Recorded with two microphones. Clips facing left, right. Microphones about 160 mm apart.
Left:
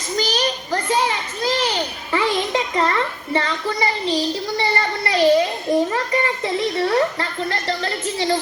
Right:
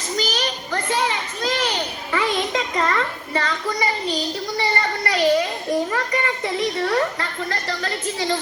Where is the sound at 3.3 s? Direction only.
30° left (ahead or behind).